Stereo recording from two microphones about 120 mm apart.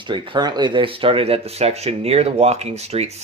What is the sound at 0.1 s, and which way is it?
Speech, 35° right (ahead or behind).